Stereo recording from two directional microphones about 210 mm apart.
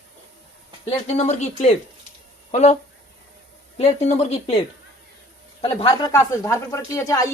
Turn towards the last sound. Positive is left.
turn(degrees=15)  # may be behind; listen again after turning